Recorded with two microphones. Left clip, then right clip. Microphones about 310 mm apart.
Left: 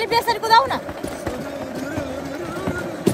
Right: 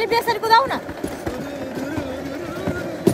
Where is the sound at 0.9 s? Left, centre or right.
Centre.